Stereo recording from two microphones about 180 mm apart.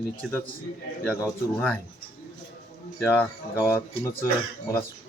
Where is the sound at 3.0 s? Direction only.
10° left (ahead or behind).